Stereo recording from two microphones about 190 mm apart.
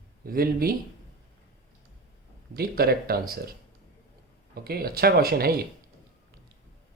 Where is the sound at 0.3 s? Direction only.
50° right (ahead or behind).